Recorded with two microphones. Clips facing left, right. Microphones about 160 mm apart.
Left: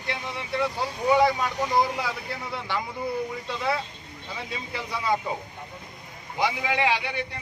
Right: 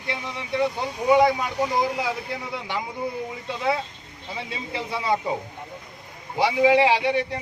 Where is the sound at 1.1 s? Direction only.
15° right (ahead or behind).